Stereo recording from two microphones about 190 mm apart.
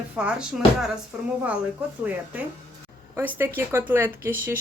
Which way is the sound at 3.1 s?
10° right (ahead or behind).